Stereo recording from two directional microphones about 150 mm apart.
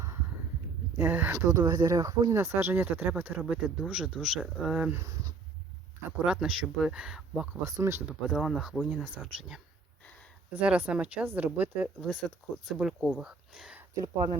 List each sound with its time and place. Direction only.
0.9 s speech: 15° right (ahead or behind)
1.5 s speech: 25° right (ahead or behind); by 5.0 s 10° right (ahead or behind)
6.1 s speech: 10° right (ahead or behind)
7.7 s speech: 20° right (ahead or behind)
8.3 s speech: centre (ahead or behind)
12.2 s speech: 5° left (ahead or behind)
13.9 s speech: 25° right (ahead or behind)